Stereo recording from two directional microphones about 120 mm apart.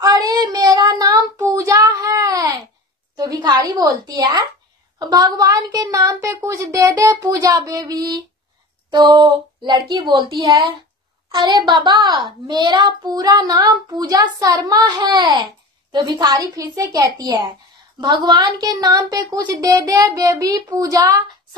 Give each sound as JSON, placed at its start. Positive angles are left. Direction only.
{"t": 0.0, "sound": "child singing", "side_deg": -30}
{"t": 3.2, "sound": "a woman's voice", "side_deg": -35}
{"t": 6.1, "sound": "a child's voice", "side_deg": -20}